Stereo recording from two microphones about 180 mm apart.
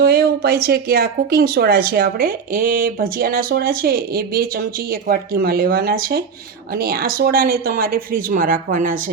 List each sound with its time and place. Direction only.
0.0 s speech: 60° right (ahead or behind)